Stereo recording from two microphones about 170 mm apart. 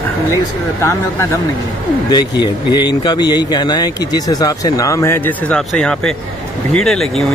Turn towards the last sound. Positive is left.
turn(degrees=0)  # may be behind; listen again after turning